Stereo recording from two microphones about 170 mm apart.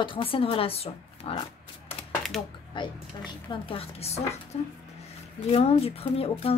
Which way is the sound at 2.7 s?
30° left (ahead or behind).